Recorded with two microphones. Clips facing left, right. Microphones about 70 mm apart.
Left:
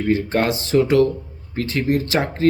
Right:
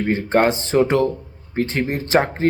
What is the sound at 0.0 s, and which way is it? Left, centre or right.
Mantra, right.